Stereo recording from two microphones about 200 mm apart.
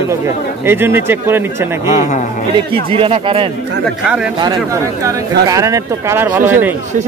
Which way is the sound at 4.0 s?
5° right (ahead or behind).